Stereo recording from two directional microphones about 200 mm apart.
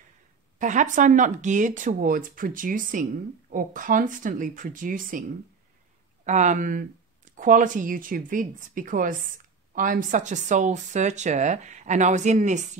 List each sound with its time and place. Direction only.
0.6 s speech: 40° right (ahead or behind)
6.2 s speech: 35° right (ahead or behind)